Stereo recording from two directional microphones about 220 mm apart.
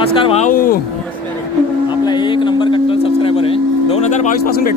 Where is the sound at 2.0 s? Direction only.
20° left (ahead or behind); by 4.8 s 40° left (ahead or behind).